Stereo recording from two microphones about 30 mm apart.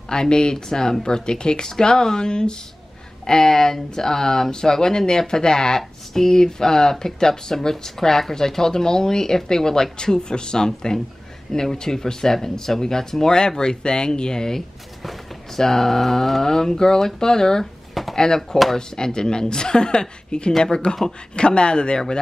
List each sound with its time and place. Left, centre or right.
0.1 s speech: left
21.4 s speech: left